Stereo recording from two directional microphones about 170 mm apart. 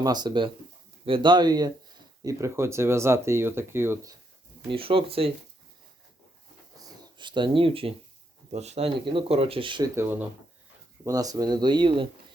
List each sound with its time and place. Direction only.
0.0 s speech: 25° right (ahead or behind)
4.7 s speech: 30° right (ahead or behind)
6.7 s a sound: 25° right (ahead or behind)
8.5 s speech: 40° right (ahead or behind)
9.9 s speech: 15° right (ahead or behind)